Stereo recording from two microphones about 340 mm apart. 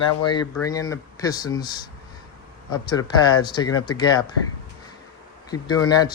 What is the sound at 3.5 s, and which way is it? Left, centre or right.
Speech, centre.